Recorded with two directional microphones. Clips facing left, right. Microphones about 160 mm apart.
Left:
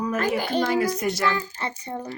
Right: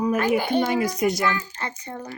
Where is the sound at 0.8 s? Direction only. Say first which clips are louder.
Right 1 dB; 35° left (ahead or behind).